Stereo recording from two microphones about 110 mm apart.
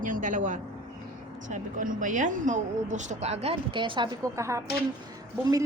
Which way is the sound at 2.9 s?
90° right.